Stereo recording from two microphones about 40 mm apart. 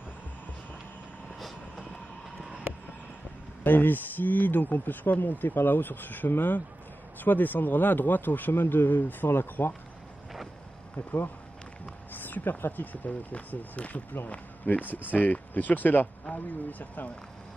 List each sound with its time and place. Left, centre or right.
3.6 s speech: left
9.3 s speech: left
11.0 s speech: left
12.1 s a sound: left
12.7 s speech: left